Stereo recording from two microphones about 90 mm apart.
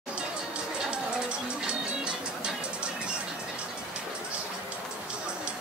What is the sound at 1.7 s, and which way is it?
Music, 10° right (ahead or behind).